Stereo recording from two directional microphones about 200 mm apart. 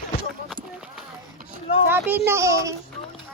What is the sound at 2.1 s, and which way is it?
Speech, 10° right (ahead or behind).